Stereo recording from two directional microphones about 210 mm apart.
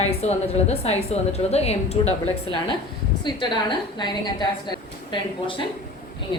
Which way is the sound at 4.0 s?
20° left (ahead or behind).